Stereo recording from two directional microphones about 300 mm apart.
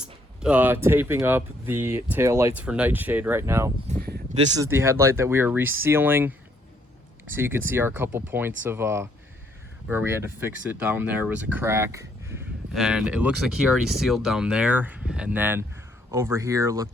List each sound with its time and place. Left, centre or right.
0.0 s speech: centre
3.8 s a sound: right
4.6 s speech: centre